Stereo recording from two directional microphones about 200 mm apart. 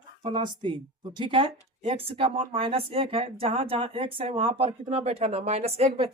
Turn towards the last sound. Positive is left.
turn(degrees=-30)  # may be behind; listen again after turning